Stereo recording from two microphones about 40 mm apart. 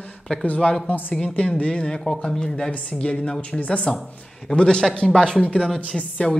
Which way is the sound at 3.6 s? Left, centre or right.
Left.